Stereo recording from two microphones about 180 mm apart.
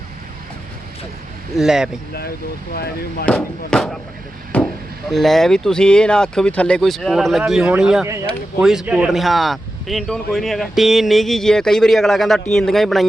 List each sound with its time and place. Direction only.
1.5 s speech: centre (ahead or behind)
2.7 s speech: 60° left (ahead or behind)
3.2 s speech: 5° left (ahead or behind)